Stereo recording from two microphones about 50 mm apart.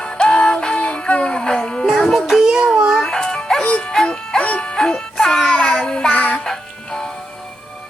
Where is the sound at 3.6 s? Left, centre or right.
Left.